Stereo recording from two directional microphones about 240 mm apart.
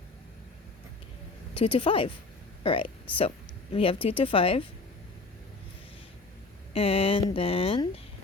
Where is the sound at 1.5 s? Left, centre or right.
Left.